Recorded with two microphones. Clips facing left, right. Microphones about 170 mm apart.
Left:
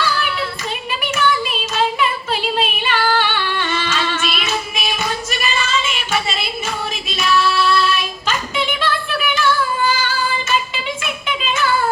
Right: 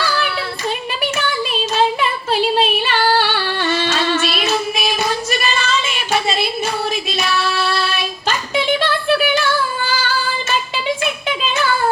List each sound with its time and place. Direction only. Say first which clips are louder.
0.0 s child singing: even; 35° right (ahead or behind)
2.3 s female singing: right 4 dB; 35° right (ahead or behind)
7.1 s child singing: left 2 dB; 35° right (ahead or behind)
11.0 s a sound: right 3 dB; 35° right (ahead or behind)